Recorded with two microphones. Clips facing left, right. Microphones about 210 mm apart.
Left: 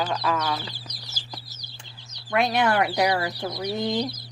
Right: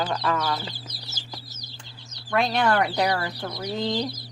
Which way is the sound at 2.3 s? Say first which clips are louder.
Even; 10° left (ahead or behind).